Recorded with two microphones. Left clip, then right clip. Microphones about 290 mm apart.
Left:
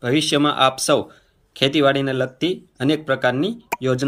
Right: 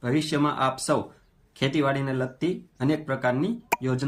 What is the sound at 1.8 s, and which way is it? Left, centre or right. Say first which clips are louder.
Speech: left 8 dB; centre.